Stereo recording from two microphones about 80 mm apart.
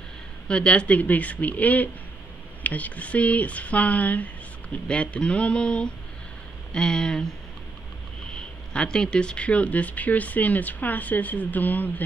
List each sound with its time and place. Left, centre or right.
0.5 s speech: centre
8.4 s speech: centre